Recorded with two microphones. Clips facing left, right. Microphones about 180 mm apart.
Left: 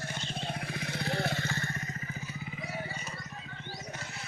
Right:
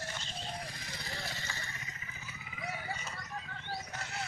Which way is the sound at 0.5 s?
65° left (ahead or behind).